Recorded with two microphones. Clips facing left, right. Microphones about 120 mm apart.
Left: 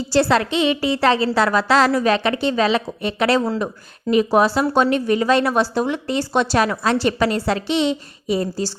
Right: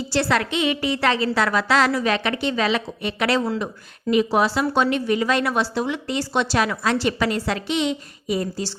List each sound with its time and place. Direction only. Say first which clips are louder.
0.1 s a woman's voice: left 5 dB; 35° left (ahead or behind)